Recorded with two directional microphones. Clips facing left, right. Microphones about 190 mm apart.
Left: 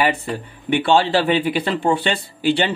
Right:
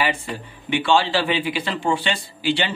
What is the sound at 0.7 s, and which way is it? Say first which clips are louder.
A man's voice: left 3 dB; 55° left (ahead or behind).